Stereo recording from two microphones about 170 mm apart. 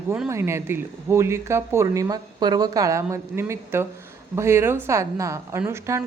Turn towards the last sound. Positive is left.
turn(degrees=-15)  # may be behind; listen again after turning